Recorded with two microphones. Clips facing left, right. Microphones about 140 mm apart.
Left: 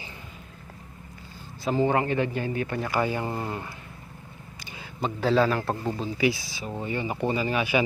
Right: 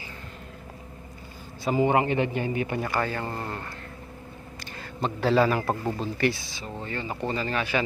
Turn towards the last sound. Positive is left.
turn(degrees=10)  # may be behind; listen again after turning